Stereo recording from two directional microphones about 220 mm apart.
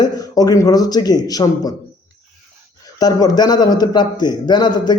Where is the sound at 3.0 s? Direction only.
15° left (ahead or behind).